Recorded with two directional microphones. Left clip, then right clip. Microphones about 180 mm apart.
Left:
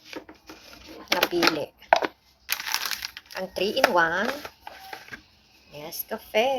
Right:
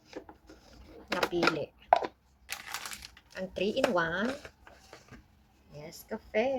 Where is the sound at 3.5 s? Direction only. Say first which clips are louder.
Left 5 dB; 25° right (ahead or behind).